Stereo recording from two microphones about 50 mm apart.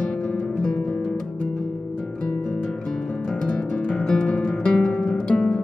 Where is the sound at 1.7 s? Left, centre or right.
Left.